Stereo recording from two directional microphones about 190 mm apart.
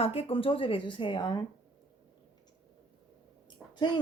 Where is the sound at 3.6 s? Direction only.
Centre (ahead or behind).